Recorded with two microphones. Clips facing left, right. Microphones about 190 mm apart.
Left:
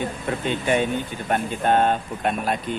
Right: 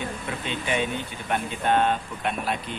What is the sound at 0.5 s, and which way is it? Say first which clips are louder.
Speech: left 5 dB; 50° left (ahead or behind).